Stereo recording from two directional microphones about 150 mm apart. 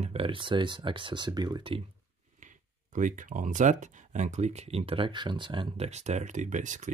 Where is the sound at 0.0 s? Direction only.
40° right (ahead or behind).